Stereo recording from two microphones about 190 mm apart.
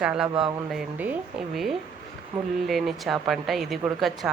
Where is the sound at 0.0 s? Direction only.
5° right (ahead or behind).